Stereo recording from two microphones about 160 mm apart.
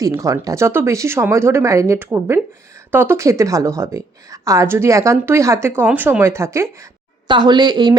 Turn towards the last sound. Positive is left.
turn(degrees=-25)  # may be behind; listen again after turning